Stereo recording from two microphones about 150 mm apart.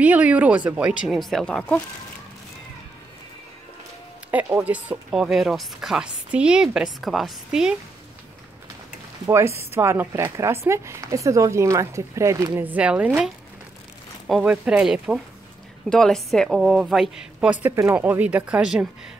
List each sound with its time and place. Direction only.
0.0 s speech: 10° right (ahead or behind); by 1.8 s 10° left (ahead or behind)
4.3 s speech: 15° right (ahead or behind)
9.2 s speech: 20° right (ahead or behind)